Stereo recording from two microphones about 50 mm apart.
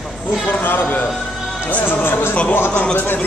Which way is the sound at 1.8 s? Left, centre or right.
Left.